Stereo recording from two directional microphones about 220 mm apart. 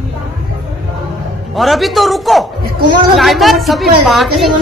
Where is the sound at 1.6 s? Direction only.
Centre (ahead or behind).